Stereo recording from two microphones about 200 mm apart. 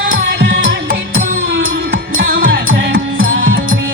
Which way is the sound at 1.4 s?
65° right (ahead or behind).